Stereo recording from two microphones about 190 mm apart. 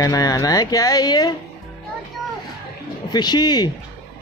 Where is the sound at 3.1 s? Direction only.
20° left (ahead or behind).